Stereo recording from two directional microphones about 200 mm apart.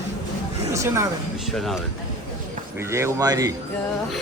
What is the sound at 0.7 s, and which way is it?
Speech, 15° right (ahead or behind).